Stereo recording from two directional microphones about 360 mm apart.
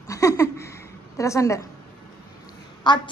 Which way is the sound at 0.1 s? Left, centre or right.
Centre.